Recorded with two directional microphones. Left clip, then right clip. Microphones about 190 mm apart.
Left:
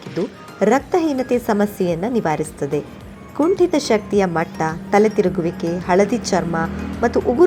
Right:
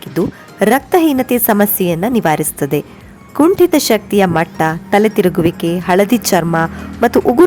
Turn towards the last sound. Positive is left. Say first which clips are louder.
# right 5 dB
turn(degrees=-45)  # may be behind; listen again after turning